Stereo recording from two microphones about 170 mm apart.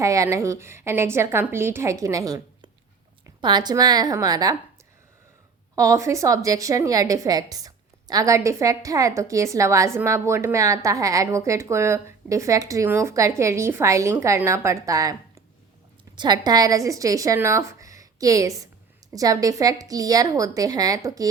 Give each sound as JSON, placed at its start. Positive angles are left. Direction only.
{"t": 0.0, "sound": "a woman's voice", "side_deg": -20}
{"t": 5.7, "sound": "a woman's voice", "side_deg": -20}
{"t": 16.1, "sound": "a woman's voice", "side_deg": -25}